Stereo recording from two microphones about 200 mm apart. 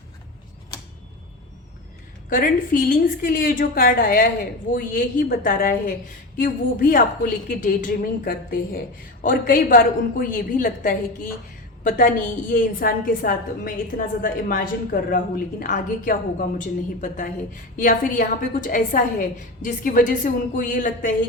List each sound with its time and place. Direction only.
2.3 s a woman's voice: 45° left (ahead or behind)